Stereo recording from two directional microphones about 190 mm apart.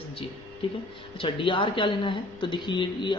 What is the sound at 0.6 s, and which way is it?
Speech, 30° left (ahead or behind).